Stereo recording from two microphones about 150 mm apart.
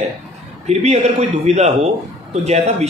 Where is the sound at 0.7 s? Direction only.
50° right (ahead or behind).